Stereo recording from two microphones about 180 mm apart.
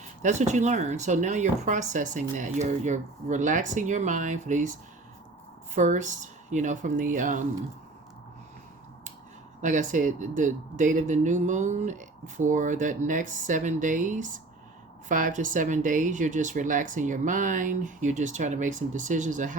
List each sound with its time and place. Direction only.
0.2 s speech: 40° right (ahead or behind)
5.7 s speech: 40° right (ahead or behind)
9.6 s speech: 45° right (ahead or behind)